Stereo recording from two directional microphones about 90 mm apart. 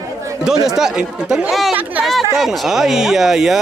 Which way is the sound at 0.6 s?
5° right (ahead or behind).